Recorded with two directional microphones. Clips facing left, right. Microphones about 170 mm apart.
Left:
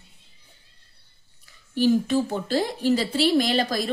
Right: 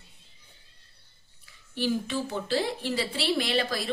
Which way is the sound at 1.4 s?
45° left (ahead or behind).